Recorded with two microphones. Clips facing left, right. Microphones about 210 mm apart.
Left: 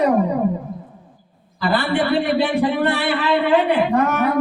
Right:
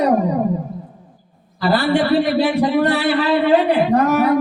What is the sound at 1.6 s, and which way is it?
A man's voice, 40° right (ahead or behind).